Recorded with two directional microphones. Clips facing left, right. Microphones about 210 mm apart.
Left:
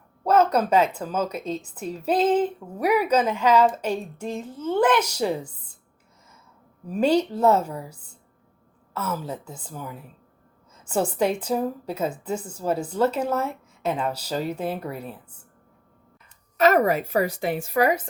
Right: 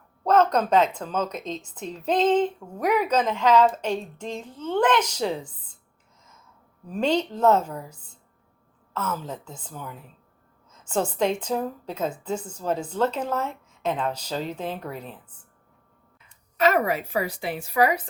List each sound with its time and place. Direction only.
0.3 s a woman's voice: 10° left (ahead or behind)
6.8 s a woman's voice: 10° left (ahead or behind)
16.6 s a woman's voice: 40° left (ahead or behind)